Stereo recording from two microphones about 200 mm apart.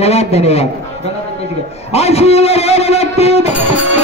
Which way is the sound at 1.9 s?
30° left (ahead or behind).